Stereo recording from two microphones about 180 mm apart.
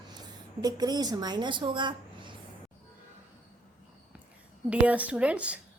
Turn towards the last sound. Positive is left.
turn(degrees=-5)  # may be behind; listen again after turning